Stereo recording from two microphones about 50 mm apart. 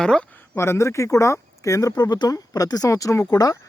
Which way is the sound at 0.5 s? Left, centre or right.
Left.